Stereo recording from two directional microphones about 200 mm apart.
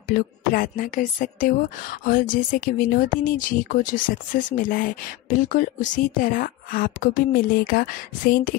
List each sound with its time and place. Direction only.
0.1 s speech: 45° left (ahead or behind)